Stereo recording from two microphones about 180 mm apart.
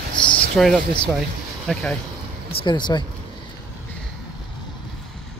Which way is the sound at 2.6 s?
25° left (ahead or behind).